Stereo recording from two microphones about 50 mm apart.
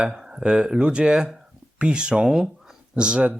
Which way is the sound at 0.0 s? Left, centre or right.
Centre.